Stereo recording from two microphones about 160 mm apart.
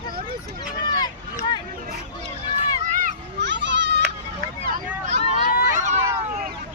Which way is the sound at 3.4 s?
90° right.